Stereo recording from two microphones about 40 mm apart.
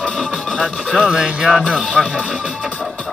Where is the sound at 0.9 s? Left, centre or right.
Centre.